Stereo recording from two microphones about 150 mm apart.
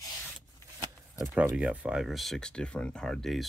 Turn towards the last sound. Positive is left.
turn(degrees=0)  # may be behind; listen again after turning